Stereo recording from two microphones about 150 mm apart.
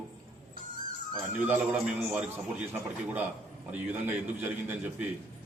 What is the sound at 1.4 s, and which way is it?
A man's voice, 10° right (ahead or behind).